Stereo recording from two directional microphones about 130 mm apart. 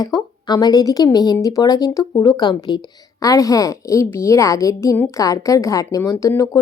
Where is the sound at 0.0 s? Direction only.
30° left (ahead or behind).